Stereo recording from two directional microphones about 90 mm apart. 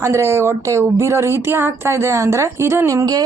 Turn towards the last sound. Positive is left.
turn(degrees=-40)  # may be behind; listen again after turning